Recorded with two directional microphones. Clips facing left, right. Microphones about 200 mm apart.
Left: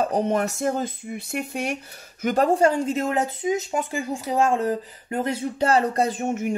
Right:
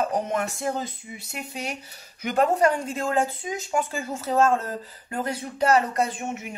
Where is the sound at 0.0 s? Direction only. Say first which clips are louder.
Left 4 dB; 35° left (ahead or behind); by 1.8 s 55° left (ahead or behind).